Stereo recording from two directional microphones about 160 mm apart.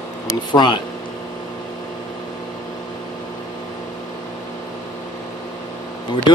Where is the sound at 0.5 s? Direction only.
30° left (ahead or behind).